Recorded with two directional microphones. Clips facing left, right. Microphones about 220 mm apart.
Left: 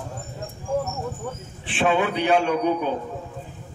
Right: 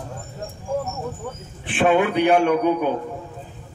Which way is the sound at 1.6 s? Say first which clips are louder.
Right 4 dB; 55° right (ahead or behind).